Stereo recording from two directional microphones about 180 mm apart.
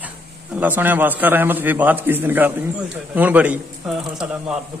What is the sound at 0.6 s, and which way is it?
A man's voice, 10° right (ahead or behind).